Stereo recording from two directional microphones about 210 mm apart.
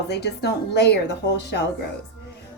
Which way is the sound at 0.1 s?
50° left (ahead or behind).